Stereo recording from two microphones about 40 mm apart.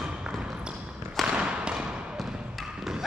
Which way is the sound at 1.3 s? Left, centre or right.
Right.